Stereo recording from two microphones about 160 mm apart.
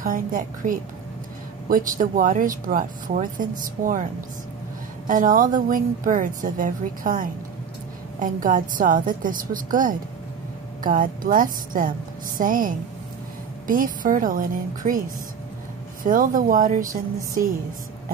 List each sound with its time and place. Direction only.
0.0 s speech: 60° right (ahead or behind)